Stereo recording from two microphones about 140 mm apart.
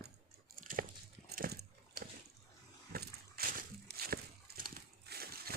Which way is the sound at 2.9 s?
90° right.